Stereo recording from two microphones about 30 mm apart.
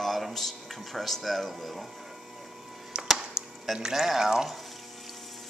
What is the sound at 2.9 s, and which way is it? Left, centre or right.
Music, right.